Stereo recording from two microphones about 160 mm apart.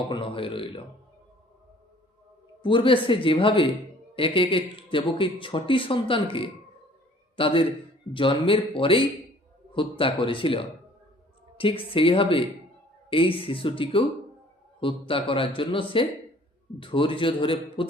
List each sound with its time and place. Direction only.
0.1 s speech: 35° left (ahead or behind)
2.6 s a man's voice: 30° left (ahead or behind)